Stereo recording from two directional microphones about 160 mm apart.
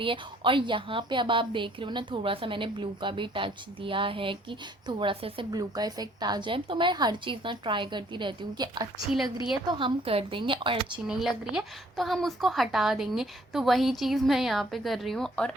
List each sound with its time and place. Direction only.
0.0 s a woman's voice: 30° right (ahead or behind)
10.9 s a woman's voice: 5° right (ahead or behind)